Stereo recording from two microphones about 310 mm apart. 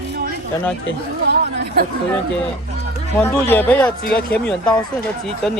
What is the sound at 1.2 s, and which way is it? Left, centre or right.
Chatter, right.